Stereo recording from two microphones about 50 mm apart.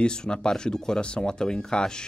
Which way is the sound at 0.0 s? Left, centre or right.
Centre.